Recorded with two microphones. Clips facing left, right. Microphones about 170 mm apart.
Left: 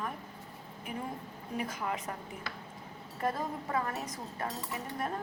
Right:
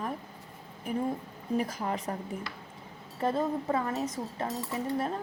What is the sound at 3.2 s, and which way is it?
Speech, 25° right (ahead or behind).